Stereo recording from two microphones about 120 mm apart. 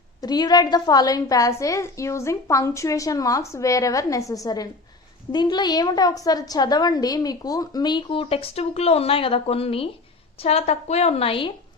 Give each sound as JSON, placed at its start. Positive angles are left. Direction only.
{"t": 0.2, "sound": "a woman's voice", "side_deg": 35}